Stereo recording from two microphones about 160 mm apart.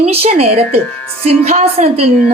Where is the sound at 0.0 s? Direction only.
40° right (ahead or behind).